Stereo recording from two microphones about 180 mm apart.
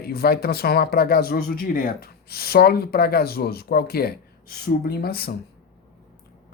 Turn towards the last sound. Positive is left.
turn(degrees=60)  # may be behind; listen again after turning